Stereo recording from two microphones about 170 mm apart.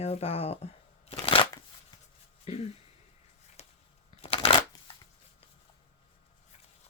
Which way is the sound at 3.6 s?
40° left (ahead or behind).